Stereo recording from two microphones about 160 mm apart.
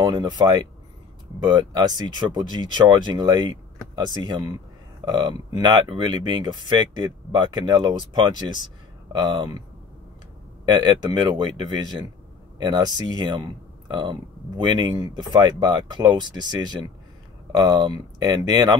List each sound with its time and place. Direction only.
0.0 s speech: 25° right (ahead or behind)
10.6 s speech: 25° right (ahead or behind)